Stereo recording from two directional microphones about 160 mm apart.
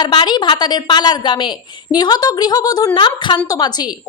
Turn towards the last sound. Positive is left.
turn(degrees=25)  # may be behind; listen again after turning